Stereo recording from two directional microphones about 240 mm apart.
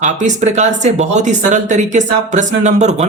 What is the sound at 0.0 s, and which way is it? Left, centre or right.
Speech, right.